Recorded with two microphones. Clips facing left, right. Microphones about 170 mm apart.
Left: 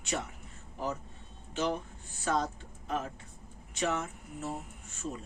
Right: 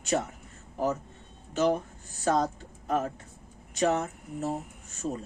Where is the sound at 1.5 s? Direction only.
45° right (ahead or behind).